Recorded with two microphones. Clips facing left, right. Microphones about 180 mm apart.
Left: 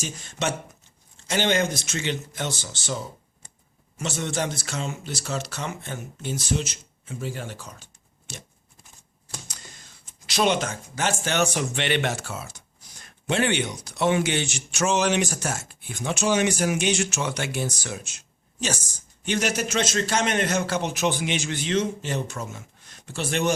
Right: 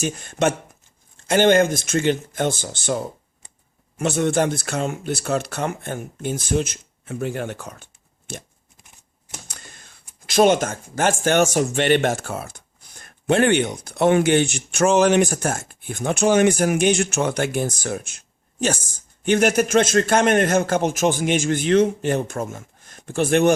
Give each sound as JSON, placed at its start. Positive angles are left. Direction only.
{"t": 0.0, "sound": "speech", "side_deg": -55}
{"t": 9.5, "sound": "typewriter", "side_deg": -55}
{"t": 10.2, "sound": "speech", "side_deg": -50}
{"t": 19.2, "sound": "speech", "side_deg": -50}